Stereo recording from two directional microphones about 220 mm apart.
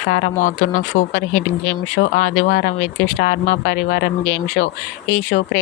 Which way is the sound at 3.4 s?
35° left (ahead or behind).